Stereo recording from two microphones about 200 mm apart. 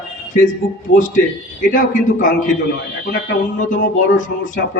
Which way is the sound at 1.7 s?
40° left (ahead or behind).